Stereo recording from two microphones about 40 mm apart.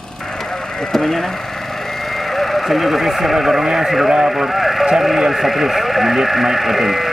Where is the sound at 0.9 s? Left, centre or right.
Centre.